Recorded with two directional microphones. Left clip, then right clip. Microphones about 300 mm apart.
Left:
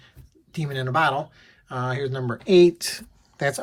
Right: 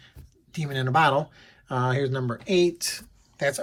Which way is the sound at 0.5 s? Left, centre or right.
Centre.